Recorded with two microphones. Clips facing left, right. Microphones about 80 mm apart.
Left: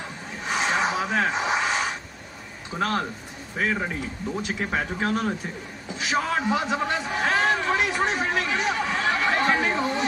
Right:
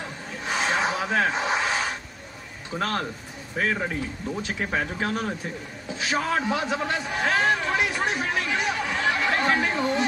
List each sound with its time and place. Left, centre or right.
0.5 s rub: centre
2.7 s a man's voice: centre; by 8.5 s left
8.5 s chatter: left
9.3 s chatter: centre